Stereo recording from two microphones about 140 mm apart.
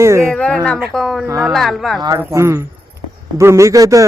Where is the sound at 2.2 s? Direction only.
20° right (ahead or behind).